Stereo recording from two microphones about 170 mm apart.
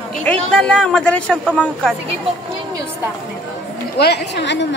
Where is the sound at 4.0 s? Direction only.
70° left (ahead or behind).